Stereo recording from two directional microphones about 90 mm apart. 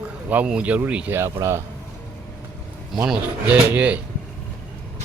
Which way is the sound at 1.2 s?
30° right (ahead or behind).